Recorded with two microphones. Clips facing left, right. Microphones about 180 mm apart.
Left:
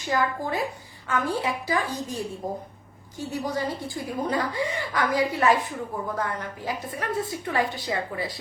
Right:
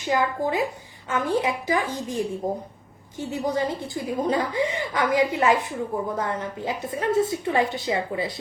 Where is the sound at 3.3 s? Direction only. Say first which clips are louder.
Right 3 dB; 20° right (ahead or behind).